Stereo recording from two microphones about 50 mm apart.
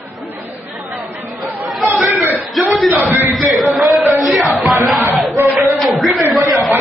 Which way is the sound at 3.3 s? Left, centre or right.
Centre.